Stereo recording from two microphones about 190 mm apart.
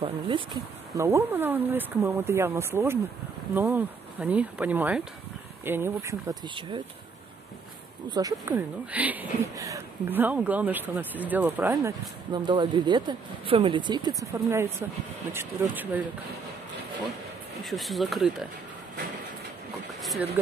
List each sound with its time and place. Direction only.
0.0 s speech: 25° right (ahead or behind)
8.1 s speech: 20° right (ahead or behind)
17.6 s speech: centre (ahead or behind)
20.0 s a sound: centre (ahead or behind)